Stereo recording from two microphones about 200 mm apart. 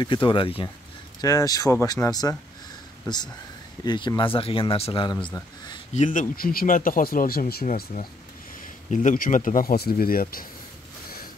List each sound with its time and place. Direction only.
0.0 s speech: 25° left (ahead or behind)
3.8 s speech: 20° left (ahead or behind)
5.9 s speech: 40° left (ahead or behind)